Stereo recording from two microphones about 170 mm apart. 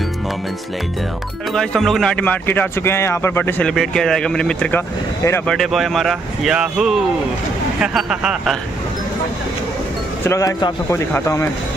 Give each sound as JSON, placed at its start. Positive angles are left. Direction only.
{"t": 1.5, "sound": "speech", "side_deg": 5}
{"t": 5.5, "sound": "speech", "side_deg": 0}
{"t": 10.2, "sound": "speech", "side_deg": 20}